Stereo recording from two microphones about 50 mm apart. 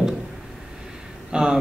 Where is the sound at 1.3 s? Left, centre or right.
Centre.